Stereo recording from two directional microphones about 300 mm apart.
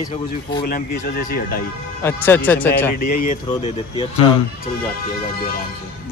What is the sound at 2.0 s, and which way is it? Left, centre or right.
Speech, centre.